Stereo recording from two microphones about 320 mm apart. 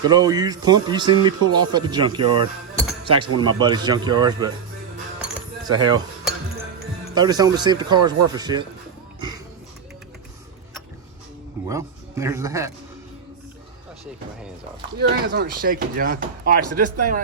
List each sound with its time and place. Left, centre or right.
0.0 s speech: centre
5.2 s cutlery: centre
7.1 s speech: centre
11.6 s speech: centre
14.9 s speech: right